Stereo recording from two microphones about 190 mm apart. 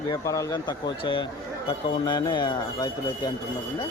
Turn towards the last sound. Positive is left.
turn(degrees=25)  # may be behind; listen again after turning